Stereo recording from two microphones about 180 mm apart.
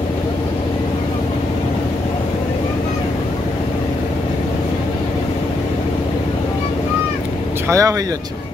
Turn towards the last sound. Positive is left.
turn(degrees=-15)  # may be behind; listen again after turning